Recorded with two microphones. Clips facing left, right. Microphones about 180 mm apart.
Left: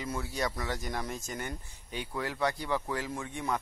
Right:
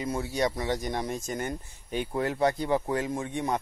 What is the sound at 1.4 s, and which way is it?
Speech, 45° right (ahead or behind).